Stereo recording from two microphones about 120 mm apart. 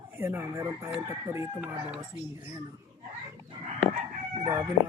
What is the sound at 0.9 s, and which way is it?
Crowing, 15° right (ahead or behind).